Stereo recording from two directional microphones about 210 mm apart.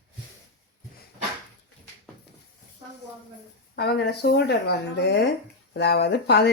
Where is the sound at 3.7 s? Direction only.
50° left (ahead or behind).